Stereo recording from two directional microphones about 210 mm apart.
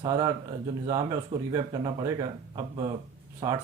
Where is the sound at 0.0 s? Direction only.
20° right (ahead or behind).